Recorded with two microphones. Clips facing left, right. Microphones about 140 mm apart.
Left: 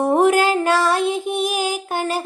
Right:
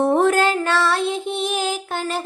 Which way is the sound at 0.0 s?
10° left (ahead or behind).